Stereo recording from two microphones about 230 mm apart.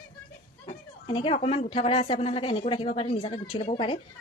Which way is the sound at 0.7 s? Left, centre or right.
Left.